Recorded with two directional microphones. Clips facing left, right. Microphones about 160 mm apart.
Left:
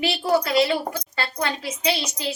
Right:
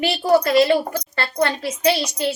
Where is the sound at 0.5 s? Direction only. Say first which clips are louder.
Right 5 dB; 55° right (ahead or behind).